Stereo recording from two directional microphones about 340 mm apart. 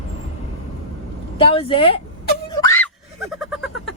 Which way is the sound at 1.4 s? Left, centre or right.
Centre.